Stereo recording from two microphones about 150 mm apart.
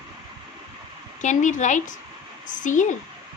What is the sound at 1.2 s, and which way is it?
A woman's voice, 55° left (ahead or behind).